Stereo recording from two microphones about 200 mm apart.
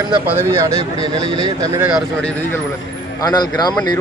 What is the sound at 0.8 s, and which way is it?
Speech, 30° left (ahead or behind).